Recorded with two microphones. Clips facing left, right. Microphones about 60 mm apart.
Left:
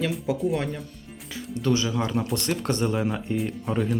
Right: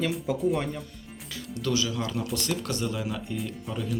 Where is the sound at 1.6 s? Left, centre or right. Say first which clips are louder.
Left 4 dB; left.